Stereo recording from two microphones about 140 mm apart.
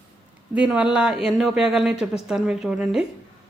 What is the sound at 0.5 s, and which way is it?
A woman's voice, 5° right (ahead or behind).